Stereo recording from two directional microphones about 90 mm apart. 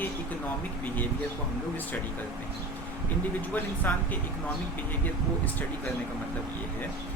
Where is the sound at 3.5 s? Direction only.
20° left (ahead or behind).